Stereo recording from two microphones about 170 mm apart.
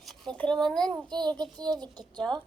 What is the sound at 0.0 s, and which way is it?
A child's voice, centre (ahead or behind).